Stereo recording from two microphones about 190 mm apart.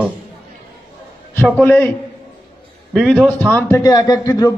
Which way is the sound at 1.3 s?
10° left (ahead or behind).